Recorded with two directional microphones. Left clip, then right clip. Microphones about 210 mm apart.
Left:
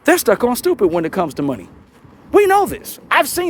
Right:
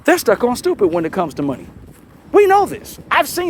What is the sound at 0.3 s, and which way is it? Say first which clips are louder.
Speech: even; 35° left (ahead or behind).